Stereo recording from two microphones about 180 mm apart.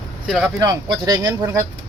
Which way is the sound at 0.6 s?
20° right (ahead or behind).